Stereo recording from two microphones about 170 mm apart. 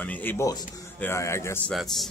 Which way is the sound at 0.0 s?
10° left (ahead or behind).